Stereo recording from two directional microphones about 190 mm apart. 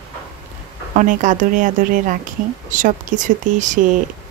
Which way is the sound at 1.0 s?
45° right (ahead or behind).